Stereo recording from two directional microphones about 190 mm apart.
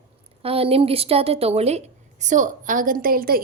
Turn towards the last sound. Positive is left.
turn(degrees=-50)  # may be behind; listen again after turning